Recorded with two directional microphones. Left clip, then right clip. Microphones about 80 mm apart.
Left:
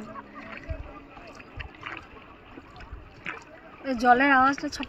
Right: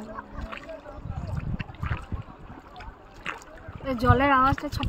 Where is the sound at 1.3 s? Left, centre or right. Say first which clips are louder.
Right 3 dB; centre.